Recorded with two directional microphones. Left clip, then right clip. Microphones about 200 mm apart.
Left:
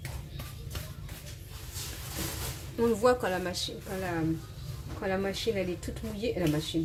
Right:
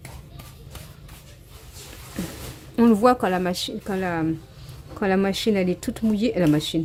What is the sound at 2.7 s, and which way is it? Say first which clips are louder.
A woman's voice: right 7 dB; 50° right (ahead or behind).